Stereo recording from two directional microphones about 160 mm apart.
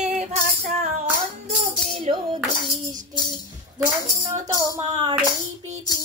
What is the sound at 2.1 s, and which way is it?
Music, 40° right (ahead or behind).